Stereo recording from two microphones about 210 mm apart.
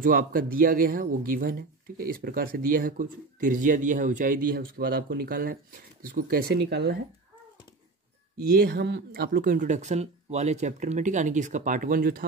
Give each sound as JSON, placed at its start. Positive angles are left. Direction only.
{"t": 0.0, "sound": "speech", "side_deg": -40}
{"t": 8.4, "sound": "speech", "side_deg": -50}